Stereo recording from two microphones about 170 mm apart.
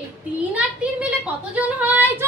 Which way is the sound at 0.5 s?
5° right (ahead or behind).